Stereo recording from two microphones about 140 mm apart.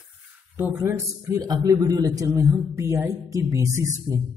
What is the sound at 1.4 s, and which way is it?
A man's voice, 30° right (ahead or behind).